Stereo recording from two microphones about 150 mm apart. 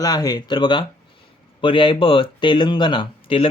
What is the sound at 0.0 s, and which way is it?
Speech, 25° left (ahead or behind).